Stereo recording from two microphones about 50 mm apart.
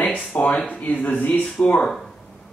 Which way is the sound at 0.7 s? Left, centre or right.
Left.